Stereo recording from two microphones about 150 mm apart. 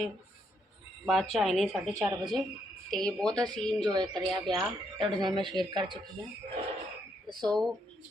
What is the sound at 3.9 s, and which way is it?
Speech, 30° right (ahead or behind).